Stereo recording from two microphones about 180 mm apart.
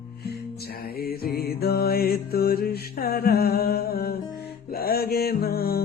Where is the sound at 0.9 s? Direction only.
55° left (ahead or behind).